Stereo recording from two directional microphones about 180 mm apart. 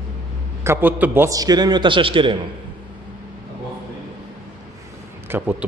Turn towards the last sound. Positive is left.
turn(degrees=-10)  # may be behind; listen again after turning